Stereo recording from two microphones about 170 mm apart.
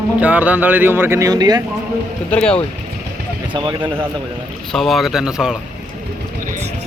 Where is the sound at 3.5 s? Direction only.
25° right (ahead or behind).